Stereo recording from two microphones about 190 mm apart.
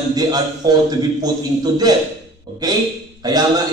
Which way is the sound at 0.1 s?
20° right (ahead or behind).